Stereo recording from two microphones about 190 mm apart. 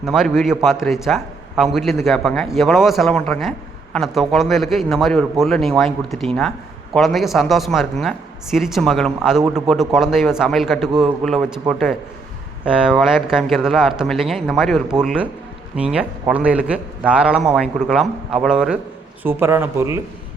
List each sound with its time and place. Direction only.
0.0 s a man's voice: centre (ahead or behind)